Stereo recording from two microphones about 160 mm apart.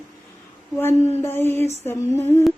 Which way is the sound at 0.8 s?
15° left (ahead or behind).